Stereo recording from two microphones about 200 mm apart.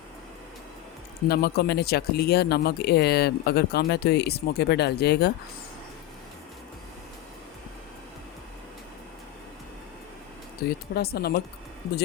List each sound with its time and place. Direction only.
1.3 s speech: 55° left (ahead or behind)
10.7 s speech: 50° left (ahead or behind)